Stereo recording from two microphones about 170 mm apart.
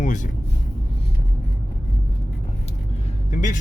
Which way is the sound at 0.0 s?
45° left (ahead or behind).